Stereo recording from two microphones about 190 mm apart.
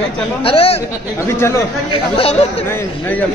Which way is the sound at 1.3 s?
15° left (ahead or behind).